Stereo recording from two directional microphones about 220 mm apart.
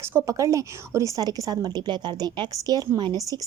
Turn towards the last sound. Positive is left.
turn(degrees=-20)  # may be behind; listen again after turning